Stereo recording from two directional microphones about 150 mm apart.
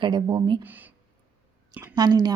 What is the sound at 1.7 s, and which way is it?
Speech, 25° right (ahead or behind).